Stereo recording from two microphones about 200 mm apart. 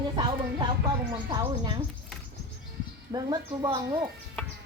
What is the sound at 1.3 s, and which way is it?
Speech, 20° right (ahead or behind).